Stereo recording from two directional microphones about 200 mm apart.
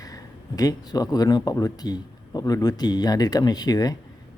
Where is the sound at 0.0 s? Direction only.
20° left (ahead or behind).